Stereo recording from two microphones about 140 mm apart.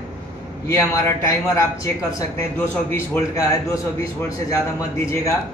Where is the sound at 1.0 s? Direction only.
20° left (ahead or behind).